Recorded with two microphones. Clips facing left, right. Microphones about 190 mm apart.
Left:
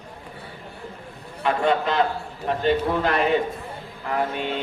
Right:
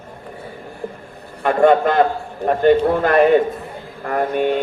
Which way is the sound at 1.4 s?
50° right (ahead or behind).